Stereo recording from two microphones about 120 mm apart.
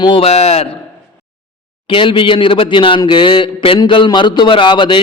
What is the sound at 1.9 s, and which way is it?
Speech, 45° left (ahead or behind).